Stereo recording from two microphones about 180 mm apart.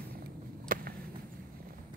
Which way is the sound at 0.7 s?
50° right (ahead or behind).